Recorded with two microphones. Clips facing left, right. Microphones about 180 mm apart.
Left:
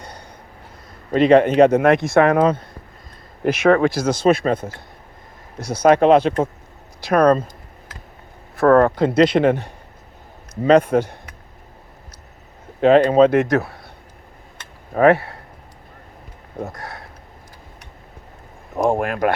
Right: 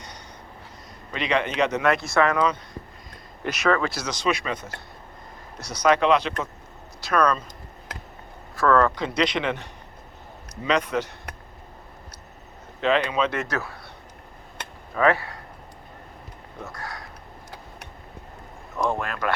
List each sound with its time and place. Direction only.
0.0 s a sound: 55° left (ahead or behind)
1.1 s speech: 50° left (ahead or behind)
8.6 s speech: 50° left (ahead or behind)
10.6 s speech: 50° left (ahead or behind)
12.8 s speech: 45° left (ahead or behind)
14.9 s speech: 50° left (ahead or behind)
16.6 s a sound: 25° left (ahead or behind)
18.9 s speech: 50° left (ahead or behind)